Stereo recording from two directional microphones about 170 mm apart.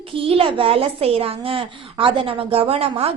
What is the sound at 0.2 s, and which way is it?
A woman's voice, 30° right (ahead or behind).